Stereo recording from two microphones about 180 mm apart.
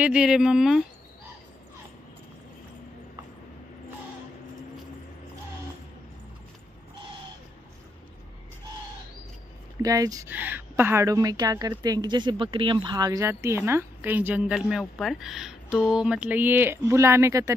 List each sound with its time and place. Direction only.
0.0 s speech: 5° right (ahead or behind)
9.8 s a woman's voice: 20° right (ahead or behind)